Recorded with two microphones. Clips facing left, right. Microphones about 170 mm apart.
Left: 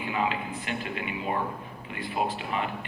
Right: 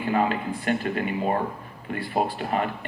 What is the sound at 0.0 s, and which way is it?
Speech, 50° right (ahead or behind).